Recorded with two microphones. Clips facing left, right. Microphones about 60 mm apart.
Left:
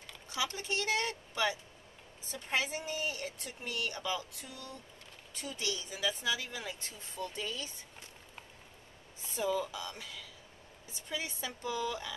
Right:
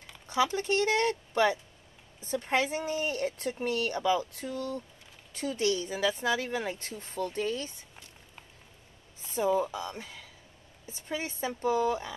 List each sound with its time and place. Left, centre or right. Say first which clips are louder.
0.6 s speech: right 7 dB; right
9.2 s speech: right 6 dB; right